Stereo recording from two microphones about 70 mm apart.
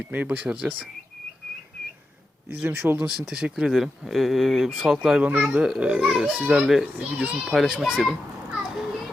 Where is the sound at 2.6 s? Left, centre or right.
Right.